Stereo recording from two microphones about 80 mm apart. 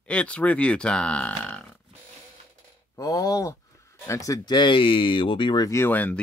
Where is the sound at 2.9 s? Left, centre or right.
Left.